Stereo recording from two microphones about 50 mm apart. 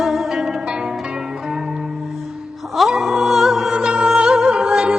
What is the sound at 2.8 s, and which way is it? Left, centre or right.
Music, centre.